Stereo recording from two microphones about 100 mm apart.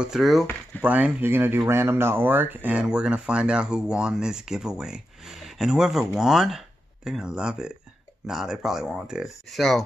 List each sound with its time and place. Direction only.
0.0 s speech: 5° right (ahead or behind)
0.8 s speech: 15° right (ahead or behind); by 9.8 s centre (ahead or behind)